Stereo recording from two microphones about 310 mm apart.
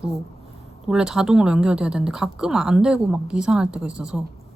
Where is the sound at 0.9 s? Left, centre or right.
Centre.